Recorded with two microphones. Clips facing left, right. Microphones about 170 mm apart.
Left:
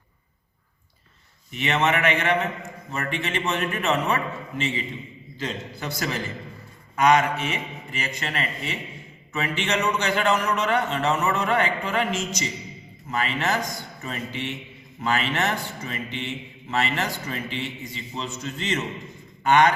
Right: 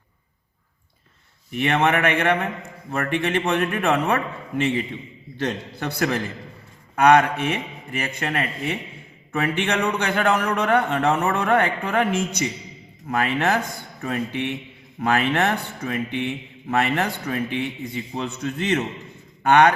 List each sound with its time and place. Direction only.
1.5 s a man's voice: 55° right (ahead or behind)